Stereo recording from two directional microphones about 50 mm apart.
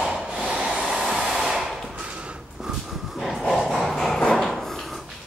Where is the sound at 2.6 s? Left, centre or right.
Centre.